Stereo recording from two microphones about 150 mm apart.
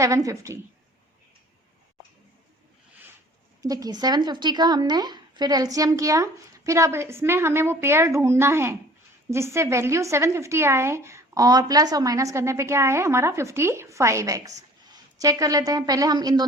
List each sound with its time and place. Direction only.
0.0 s speech: 20° right (ahead or behind)
3.6 s speech: 25° right (ahead or behind)